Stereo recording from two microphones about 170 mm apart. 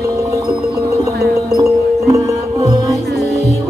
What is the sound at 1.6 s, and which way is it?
Music, 20° right (ahead or behind).